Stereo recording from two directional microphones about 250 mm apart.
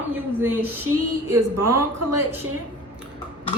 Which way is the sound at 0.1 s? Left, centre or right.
Centre.